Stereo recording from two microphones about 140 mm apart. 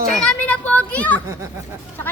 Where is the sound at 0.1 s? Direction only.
5° left (ahead or behind).